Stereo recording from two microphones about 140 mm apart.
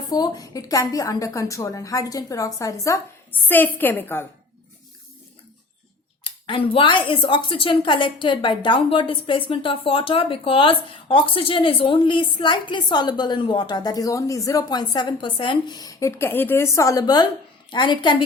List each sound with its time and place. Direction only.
0.1 s a woman's voice: 25° left (ahead or behind)
6.2 s speech: 40° left (ahead or behind)